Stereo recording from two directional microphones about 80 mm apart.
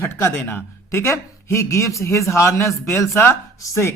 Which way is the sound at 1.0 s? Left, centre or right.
Left.